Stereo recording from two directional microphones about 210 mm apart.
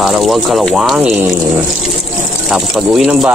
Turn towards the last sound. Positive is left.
turn(degrees=-5)  # may be behind; listen again after turning